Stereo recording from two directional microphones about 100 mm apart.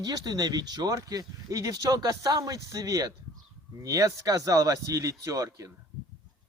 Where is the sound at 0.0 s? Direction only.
40° right (ahead or behind).